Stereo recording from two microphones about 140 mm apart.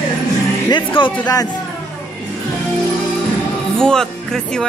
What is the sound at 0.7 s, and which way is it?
Speech, 35° left (ahead or behind).